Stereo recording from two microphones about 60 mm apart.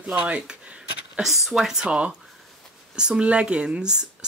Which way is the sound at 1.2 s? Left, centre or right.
Centre.